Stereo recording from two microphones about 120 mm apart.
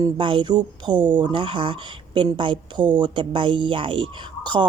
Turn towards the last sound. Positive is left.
turn(degrees=-40)  # may be behind; listen again after turning